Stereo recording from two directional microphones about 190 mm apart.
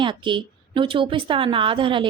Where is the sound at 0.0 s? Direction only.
25° right (ahead or behind).